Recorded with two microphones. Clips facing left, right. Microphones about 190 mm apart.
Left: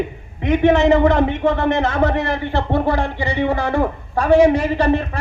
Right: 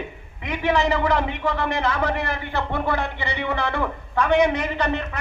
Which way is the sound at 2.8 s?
45° left (ahead or behind).